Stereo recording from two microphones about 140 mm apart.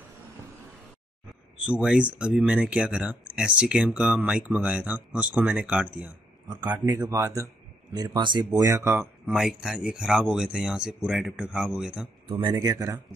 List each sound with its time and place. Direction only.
1.6 s speech: 5° right (ahead or behind)
6.7 s speech: 25° right (ahead or behind)
9.2 s speech: 5° right (ahead or behind)
12.3 s speech: 35° right (ahead or behind)
12.5 s speech: 25° right (ahead or behind)